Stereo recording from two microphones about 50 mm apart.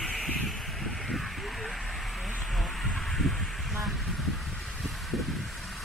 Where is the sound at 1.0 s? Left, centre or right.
Centre.